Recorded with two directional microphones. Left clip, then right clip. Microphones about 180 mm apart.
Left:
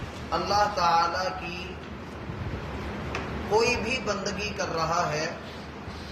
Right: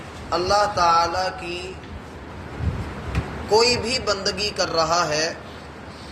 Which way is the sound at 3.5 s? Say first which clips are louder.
Right 6 dB; 25° right (ahead or behind).